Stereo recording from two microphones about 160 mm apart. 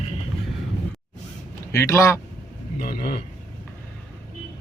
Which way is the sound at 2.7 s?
70° left (ahead or behind).